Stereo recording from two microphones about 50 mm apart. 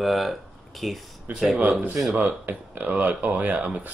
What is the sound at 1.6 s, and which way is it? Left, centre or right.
Speech, right.